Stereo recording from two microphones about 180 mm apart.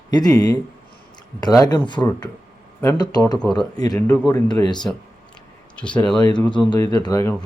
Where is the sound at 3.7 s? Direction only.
20° left (ahead or behind).